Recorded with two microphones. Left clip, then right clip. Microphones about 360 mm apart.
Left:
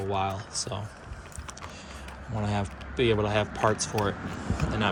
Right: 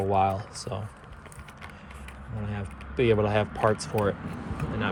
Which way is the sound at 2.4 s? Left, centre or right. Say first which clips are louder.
Left 7 dB; centre.